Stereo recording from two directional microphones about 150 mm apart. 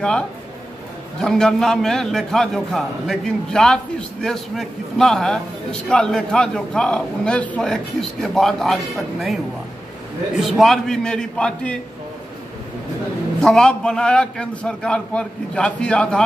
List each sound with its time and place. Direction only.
1.2 s a man's voice: 5° left (ahead or behind)
13.4 s a man's voice: 5° left (ahead or behind)